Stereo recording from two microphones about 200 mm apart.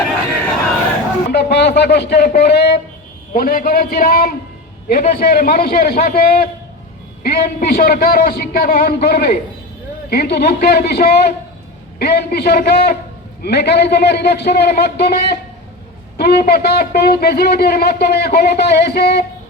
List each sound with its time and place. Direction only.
1.3 s a man's voice: 55° left (ahead or behind)